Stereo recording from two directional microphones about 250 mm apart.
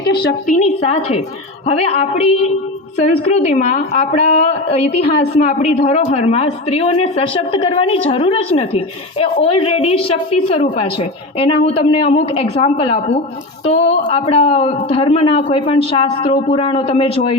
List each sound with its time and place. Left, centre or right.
0.2 s speech: left